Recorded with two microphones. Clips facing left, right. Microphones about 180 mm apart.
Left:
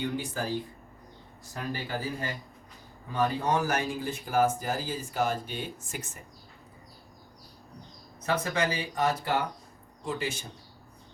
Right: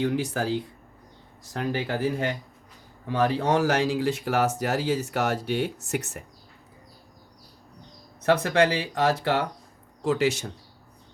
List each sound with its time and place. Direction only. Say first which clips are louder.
0.0 s speech: right 6 dB; 85° right
8.2 s speech: right 8 dB; 75° right (ahead or behind)